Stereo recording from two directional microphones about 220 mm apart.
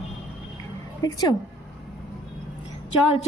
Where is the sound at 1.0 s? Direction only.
15° left (ahead or behind).